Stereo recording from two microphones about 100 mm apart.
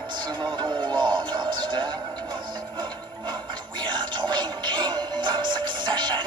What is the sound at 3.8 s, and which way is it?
Music, 50° right (ahead or behind).